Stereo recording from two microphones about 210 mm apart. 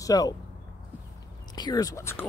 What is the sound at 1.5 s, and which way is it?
Speech, 20° left (ahead or behind).